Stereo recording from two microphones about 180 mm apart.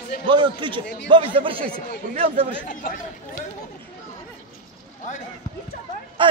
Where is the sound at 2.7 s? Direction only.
45° left (ahead or behind).